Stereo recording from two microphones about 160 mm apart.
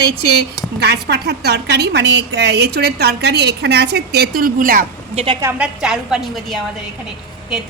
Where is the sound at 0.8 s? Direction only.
90° right; by 4.9 s 60° right (ahead or behind).